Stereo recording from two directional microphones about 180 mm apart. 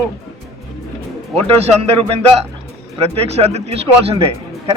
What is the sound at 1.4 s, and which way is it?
Speech, 35° right (ahead or behind).